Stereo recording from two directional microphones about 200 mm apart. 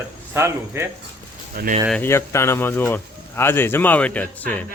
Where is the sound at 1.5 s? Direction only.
50° right (ahead or behind).